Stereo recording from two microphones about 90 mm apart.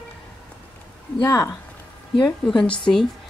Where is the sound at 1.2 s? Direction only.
35° left (ahead or behind).